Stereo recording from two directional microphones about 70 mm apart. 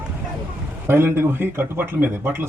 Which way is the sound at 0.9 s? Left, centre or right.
Right.